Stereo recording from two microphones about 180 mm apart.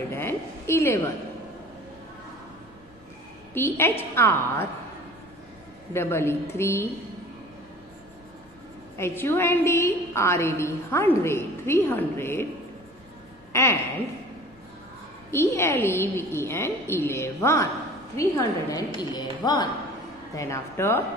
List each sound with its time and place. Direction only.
0.1 s a sound: 15° left (ahead or behind)
3.5 s a woman's voice: 10° left (ahead or behind)
5.9 s a woman's voice: 15° left (ahead or behind)
8.9 s a woman's voice: 15° left (ahead or behind)
13.5 s a sound: 15° left (ahead or behind)
15.3 s a woman's voice: 15° left (ahead or behind)